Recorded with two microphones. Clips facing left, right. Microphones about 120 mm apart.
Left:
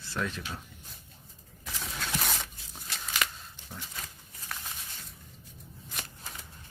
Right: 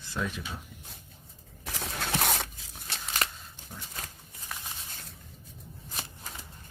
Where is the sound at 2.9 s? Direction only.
35° right (ahead or behind).